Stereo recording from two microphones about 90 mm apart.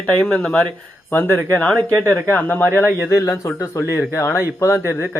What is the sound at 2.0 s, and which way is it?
Speech, 30° right (ahead or behind).